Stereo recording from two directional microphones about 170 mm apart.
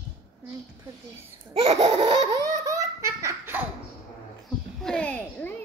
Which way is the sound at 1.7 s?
35° right (ahead or behind).